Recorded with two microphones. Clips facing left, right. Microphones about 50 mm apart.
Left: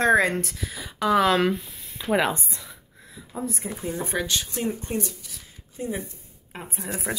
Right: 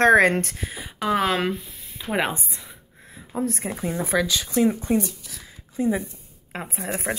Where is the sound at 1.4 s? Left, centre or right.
Centre.